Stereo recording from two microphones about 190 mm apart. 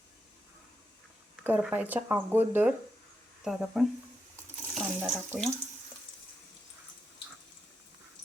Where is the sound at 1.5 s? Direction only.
10° right (ahead or behind).